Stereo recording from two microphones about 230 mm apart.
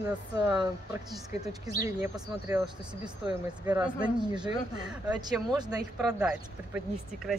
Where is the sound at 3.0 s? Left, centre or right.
Centre.